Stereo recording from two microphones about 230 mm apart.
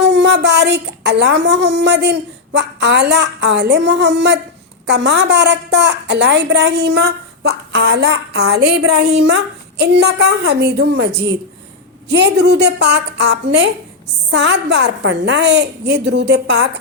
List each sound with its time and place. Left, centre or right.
0.0 s a woman's voice: right